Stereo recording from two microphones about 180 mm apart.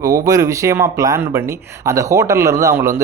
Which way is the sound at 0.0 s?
20° right (ahead or behind).